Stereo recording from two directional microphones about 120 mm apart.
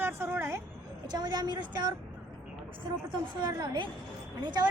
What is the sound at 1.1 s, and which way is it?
Speech, 35° right (ahead or behind).